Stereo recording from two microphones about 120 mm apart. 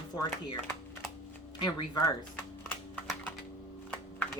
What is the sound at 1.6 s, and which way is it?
Speech, 30° left (ahead or behind).